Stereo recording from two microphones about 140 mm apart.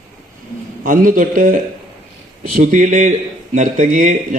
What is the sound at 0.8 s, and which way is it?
Speech, 70° right (ahead or behind).